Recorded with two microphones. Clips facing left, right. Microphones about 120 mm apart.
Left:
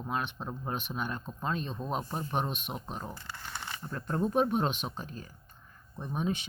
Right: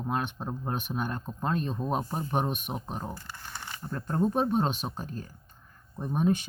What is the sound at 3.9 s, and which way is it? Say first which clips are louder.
Speech: right 3 dB; 40° right (ahead or behind).